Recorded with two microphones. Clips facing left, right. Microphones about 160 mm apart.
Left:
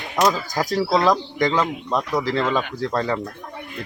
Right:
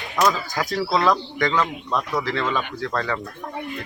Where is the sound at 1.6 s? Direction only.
20° left (ahead or behind).